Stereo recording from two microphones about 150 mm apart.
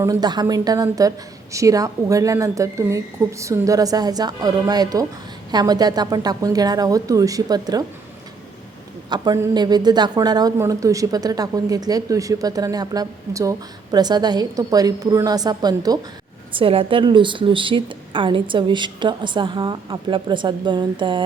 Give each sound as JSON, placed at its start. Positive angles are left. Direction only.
{"t": 0.0, "sound": "speech", "side_deg": -25}
{"t": 9.0, "sound": "speech", "side_deg": -30}
{"t": 16.5, "sound": "a woman's voice", "side_deg": -35}